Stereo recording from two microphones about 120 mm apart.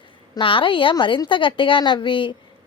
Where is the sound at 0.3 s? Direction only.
45° left (ahead or behind).